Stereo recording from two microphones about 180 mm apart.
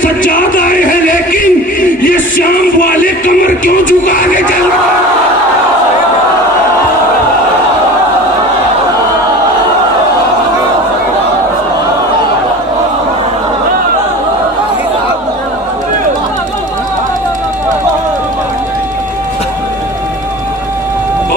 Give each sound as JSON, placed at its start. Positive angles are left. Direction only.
{"t": 0.0, "sound": "music", "side_deg": 50}